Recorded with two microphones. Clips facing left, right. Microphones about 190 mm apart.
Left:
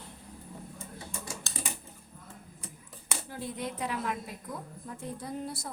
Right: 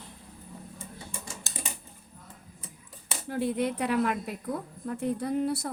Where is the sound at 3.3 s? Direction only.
65° right (ahead or behind).